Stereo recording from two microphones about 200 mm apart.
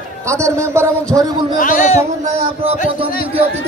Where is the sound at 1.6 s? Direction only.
40° left (ahead or behind).